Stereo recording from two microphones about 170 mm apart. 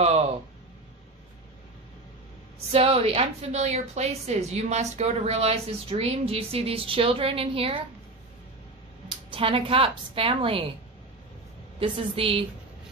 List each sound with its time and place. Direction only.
2.7 s a woman's voice: 35° right (ahead or behind)
9.3 s a woman's voice: 30° right (ahead or behind)
11.8 s a woman's voice: 30° right (ahead or behind)